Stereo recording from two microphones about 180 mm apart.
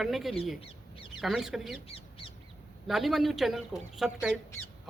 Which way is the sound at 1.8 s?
35° left (ahead or behind).